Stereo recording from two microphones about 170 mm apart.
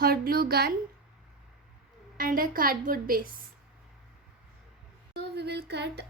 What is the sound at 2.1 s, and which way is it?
A woman's voice, 55° right (ahead or behind).